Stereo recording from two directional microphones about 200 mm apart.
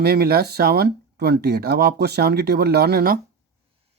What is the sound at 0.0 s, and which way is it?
Speech, 50° right (ahead or behind).